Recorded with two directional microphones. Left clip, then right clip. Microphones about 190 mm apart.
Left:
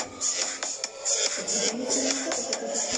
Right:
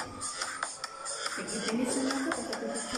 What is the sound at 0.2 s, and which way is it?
Music, 25° left (ahead or behind).